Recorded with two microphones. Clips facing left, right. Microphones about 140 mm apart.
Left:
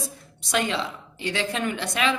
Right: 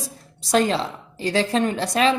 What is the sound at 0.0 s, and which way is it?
A woman's voice, 35° right (ahead or behind).